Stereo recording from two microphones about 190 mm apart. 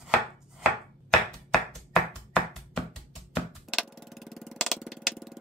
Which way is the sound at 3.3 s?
Centre (ahead or behind).